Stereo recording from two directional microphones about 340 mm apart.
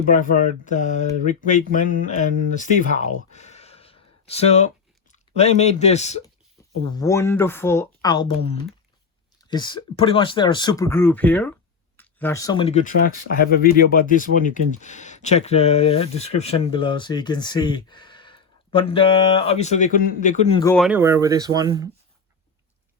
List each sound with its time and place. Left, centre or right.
0.0 s speech: left
6.9 s speech: centre